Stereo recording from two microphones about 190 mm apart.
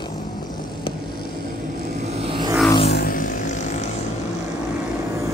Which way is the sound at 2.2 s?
25° right (ahead or behind).